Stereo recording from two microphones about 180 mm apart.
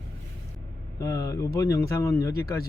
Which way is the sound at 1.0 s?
15° left (ahead or behind).